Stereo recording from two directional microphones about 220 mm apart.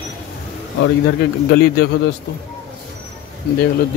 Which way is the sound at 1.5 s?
45° left (ahead or behind).